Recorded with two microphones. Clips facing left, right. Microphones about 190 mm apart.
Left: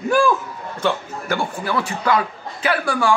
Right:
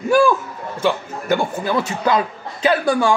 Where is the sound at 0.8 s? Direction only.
20° right (ahead or behind).